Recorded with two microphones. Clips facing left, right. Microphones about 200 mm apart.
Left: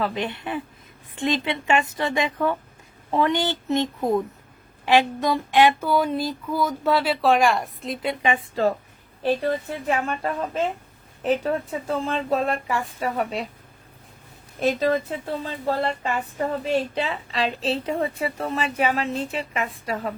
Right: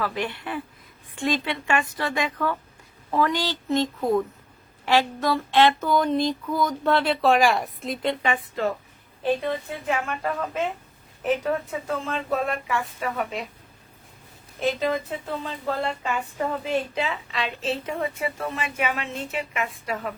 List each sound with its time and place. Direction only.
0.0 s a woman's voice: 20° left (ahead or behind); by 8.1 s centre (ahead or behind)
9.4 s a woman's voice: 35° left (ahead or behind)
14.6 s a woman's voice: 40° left (ahead or behind)